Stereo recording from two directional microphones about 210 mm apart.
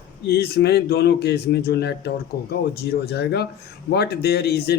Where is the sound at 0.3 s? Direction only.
50° left (ahead or behind).